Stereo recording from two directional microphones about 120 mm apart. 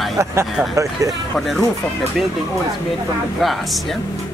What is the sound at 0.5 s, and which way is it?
Speech, centre (ahead or behind).